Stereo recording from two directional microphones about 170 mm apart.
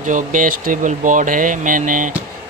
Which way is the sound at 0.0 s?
50° right (ahead or behind).